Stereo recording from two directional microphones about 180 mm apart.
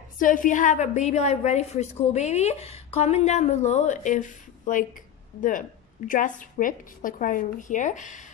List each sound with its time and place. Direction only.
0.2 s a woman's voice: 45° left (ahead or behind)